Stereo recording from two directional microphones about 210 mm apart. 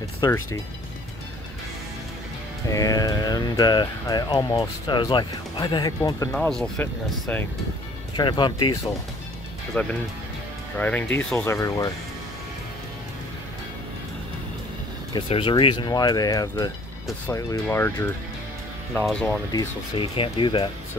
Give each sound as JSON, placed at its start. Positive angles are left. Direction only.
{"t": 0.2, "sound": "speech", "side_deg": 15}
{"t": 2.7, "sound": "speech", "side_deg": 15}
{"t": 6.3, "sound": "speech", "side_deg": 5}
{"t": 8.2, "sound": "speech", "side_deg": 20}
{"t": 9.8, "sound": "speech", "side_deg": 10}
{"t": 15.1, "sound": "speech", "side_deg": 25}
{"t": 19.5, "sound": "speech", "side_deg": 25}